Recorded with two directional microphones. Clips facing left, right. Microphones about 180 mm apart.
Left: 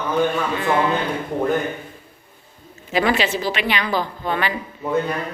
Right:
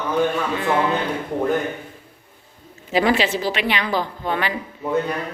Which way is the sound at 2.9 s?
30° right (ahead or behind).